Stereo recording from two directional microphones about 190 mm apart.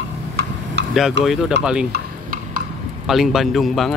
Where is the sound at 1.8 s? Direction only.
55° right (ahead or behind).